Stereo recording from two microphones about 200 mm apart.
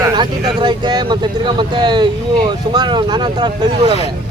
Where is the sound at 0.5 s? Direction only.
20° right (ahead or behind).